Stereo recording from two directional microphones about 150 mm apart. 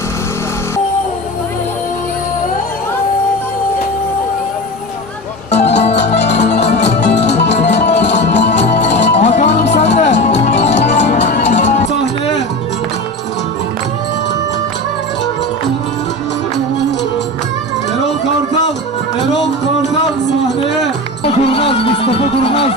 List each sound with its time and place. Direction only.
5.5 s music: 50° left (ahead or behind)
21.2 s music: 40° left (ahead or behind)